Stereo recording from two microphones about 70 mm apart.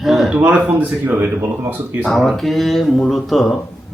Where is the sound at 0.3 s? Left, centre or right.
Right.